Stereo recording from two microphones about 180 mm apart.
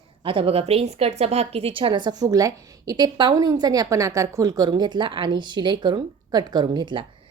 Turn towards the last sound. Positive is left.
turn(degrees=-25)  # may be behind; listen again after turning